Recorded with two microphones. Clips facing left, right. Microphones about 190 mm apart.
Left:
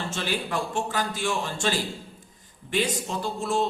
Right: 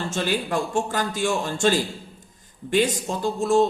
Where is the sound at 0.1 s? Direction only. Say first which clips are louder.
Right 6 dB; 45° right (ahead or behind).